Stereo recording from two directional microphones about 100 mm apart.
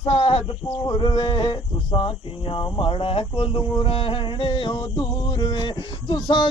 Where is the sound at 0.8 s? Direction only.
50° left (ahead or behind).